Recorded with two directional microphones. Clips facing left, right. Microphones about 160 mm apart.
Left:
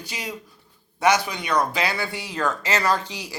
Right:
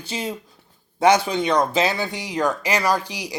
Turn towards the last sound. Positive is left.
turn(degrees=-15)  # may be behind; listen again after turning